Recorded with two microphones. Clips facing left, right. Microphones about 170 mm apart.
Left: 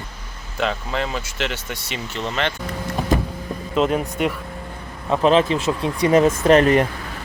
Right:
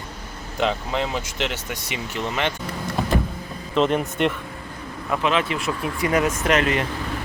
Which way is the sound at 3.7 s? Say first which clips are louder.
Even; 5° left (ahead or behind).